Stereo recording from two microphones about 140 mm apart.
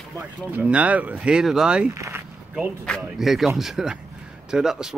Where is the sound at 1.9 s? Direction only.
20° right (ahead or behind).